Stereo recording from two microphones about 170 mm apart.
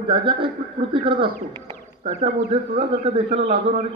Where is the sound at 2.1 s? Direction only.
40° right (ahead or behind).